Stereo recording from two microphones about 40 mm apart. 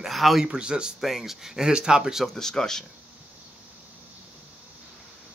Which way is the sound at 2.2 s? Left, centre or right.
Centre.